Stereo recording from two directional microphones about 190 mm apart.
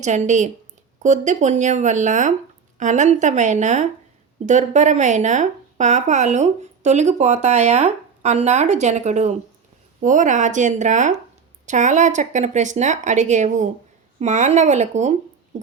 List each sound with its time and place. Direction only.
0.0 s speech: 40° right (ahead or behind)